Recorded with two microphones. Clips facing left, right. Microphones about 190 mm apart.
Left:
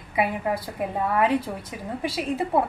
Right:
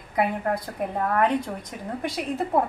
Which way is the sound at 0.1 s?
5° left (ahead or behind).